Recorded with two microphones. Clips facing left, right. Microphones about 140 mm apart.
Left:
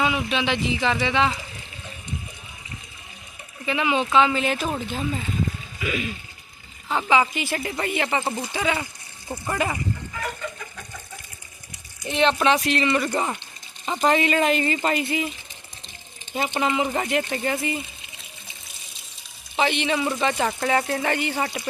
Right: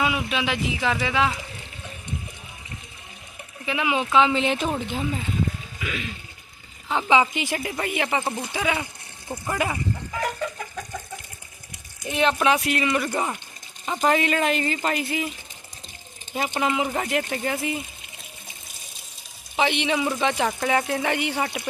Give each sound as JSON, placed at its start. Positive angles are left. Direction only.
{"t": 0.0, "sound": "speech", "side_deg": -5}
{"t": 3.7, "sound": "speech", "side_deg": -10}
{"t": 5.8, "sound": "speech", "side_deg": 10}
{"t": 6.8, "sound": "speech", "side_deg": -15}
{"t": 7.6, "sound": "speech", "side_deg": -5}
{"t": 12.0, "sound": "speech", "side_deg": -10}
{"t": 16.6, "sound": "speech", "side_deg": -5}
{"t": 19.5, "sound": "speech", "side_deg": -15}